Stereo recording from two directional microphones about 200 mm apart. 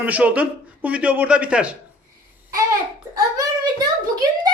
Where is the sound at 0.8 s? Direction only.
5° right (ahead or behind).